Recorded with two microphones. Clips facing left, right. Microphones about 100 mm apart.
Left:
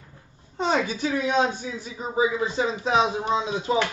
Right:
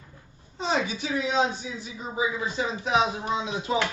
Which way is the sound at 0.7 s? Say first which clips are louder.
Left 3 dB; 45° left (ahead or behind).